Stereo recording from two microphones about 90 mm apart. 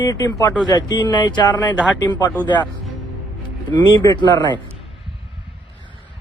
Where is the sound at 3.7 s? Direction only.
55° left (ahead or behind).